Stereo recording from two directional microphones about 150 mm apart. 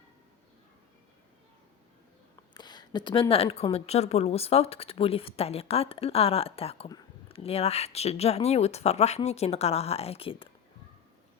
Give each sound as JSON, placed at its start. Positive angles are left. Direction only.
{"t": 2.6, "sound": "speech", "side_deg": 30}